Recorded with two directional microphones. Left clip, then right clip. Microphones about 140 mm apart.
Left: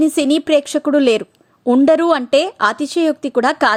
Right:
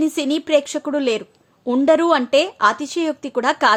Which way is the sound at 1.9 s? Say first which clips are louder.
Right 1 dB; 40° left (ahead or behind).